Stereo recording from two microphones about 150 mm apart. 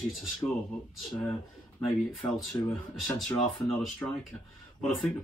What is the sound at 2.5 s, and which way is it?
Speech, 20° left (ahead or behind).